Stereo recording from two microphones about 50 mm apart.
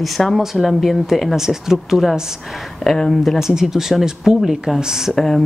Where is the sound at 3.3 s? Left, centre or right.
Centre.